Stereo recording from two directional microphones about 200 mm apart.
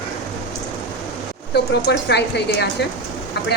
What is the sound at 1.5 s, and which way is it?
Speech, 55° left (ahead or behind).